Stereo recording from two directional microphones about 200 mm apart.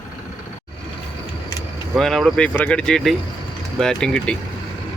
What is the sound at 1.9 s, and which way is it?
Speech, centre (ahead or behind).